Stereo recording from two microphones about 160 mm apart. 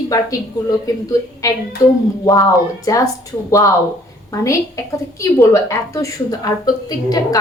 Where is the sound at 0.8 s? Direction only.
20° left (ahead or behind).